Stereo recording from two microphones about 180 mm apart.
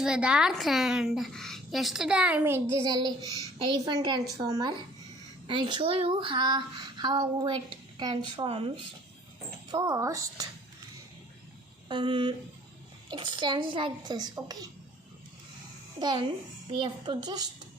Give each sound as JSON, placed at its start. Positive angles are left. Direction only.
{"t": 0.0, "sound": "a woman's voice", "side_deg": -5}
{"t": 3.2, "sound": "a child's voice", "side_deg": 20}
{"t": 3.7, "sound": "speech", "side_deg": -25}
{"t": 9.7, "sound": "speech", "side_deg": -20}
{"t": 11.9, "sound": "speech", "side_deg": -25}
{"t": 16.0, "sound": "speech", "side_deg": -25}